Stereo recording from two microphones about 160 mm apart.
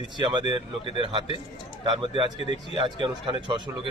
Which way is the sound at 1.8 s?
30° right (ahead or behind).